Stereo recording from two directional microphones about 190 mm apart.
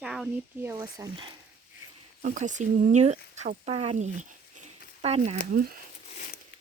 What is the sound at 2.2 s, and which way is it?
Speech, 40° right (ahead or behind).